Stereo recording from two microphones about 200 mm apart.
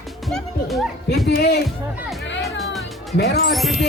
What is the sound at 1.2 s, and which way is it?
Speech, 55° left (ahead or behind).